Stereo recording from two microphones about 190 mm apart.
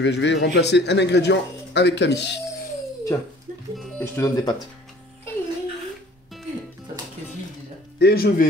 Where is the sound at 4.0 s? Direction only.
15° left (ahead or behind).